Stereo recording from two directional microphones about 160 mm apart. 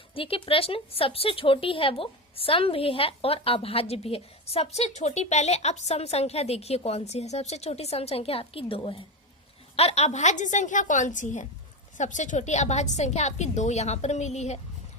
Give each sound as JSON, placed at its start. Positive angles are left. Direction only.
{"t": 0.1, "sound": "a woman's voice", "side_deg": 35}